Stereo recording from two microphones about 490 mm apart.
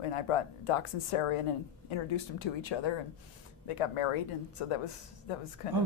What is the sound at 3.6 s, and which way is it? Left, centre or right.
Speech, left.